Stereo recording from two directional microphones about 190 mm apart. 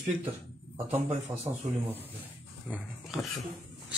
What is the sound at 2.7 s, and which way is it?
Speech, centre (ahead or behind).